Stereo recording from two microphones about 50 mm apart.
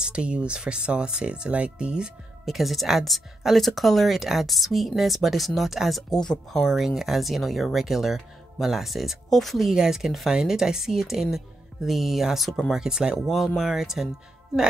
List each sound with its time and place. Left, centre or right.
0.0 s speech: right
2.4 s speech: centre
6.1 s speech: centre
6.8 s speech: centre
12.8 s speech: centre